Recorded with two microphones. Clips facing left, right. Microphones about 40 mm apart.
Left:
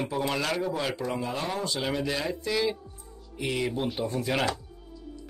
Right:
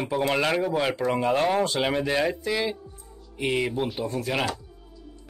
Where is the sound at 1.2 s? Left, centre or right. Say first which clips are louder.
Right 9 dB; right.